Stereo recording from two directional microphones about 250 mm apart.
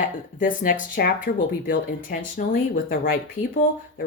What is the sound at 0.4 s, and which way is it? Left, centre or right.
Speech, left.